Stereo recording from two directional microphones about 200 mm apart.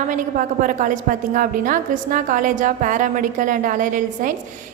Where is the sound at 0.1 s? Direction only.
40° right (ahead or behind).